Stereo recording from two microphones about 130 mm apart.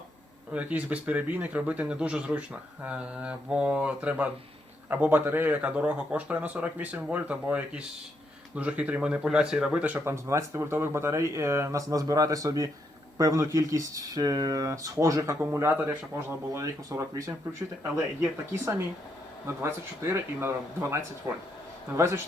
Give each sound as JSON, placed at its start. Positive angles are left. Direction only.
{"t": 0.5, "sound": "speech", "side_deg": -10}